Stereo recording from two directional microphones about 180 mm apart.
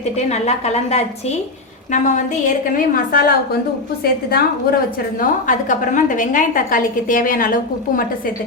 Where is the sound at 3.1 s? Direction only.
55° left (ahead or behind).